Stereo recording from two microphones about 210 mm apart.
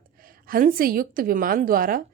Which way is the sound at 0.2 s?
45° right (ahead or behind).